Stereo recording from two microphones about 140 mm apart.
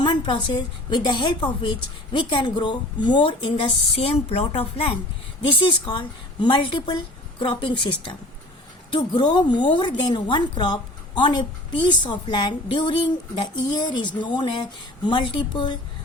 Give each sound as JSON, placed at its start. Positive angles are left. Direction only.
{"t": 0.0, "sound": "a woman's voice", "side_deg": 35}
{"t": 9.0, "sound": "a woman's voice", "side_deg": 30}